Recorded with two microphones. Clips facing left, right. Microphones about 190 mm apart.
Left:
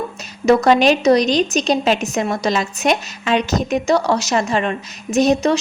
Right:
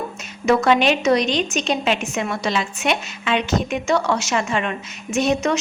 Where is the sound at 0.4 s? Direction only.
40° left (ahead or behind).